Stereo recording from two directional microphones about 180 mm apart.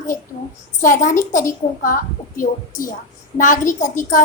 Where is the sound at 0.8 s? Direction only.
45° left (ahead or behind).